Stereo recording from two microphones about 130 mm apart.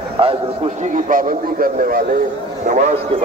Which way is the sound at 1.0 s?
90° right.